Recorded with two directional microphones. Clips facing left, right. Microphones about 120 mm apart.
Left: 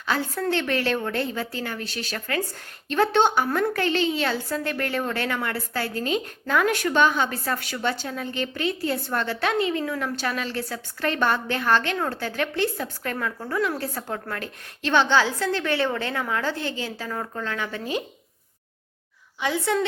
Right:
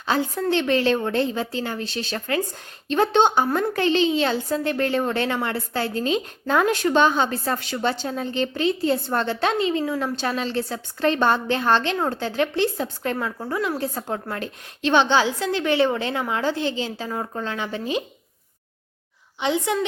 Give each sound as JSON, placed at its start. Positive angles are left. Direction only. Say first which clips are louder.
{"t": 0.0, "sound": "a woman's voice", "louder": "right 3 dB", "side_deg": -20}
{"t": 19.4, "sound": "a woman's voice", "louder": "right 2 dB", "side_deg": -20}